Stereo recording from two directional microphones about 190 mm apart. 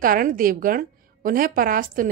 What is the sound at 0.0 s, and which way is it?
A woman's voice, 45° right (ahead or behind).